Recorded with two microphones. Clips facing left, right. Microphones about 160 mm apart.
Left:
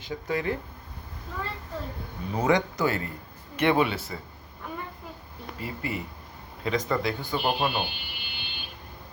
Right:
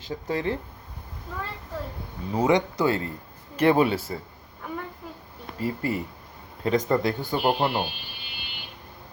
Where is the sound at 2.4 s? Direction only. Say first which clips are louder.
Right 2 dB; 20° right (ahead or behind).